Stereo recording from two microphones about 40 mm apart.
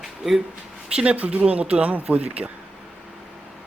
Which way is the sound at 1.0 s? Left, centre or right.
Right.